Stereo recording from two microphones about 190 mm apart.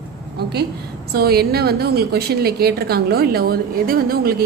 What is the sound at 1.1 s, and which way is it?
A woman's voice, 55° right (ahead or behind).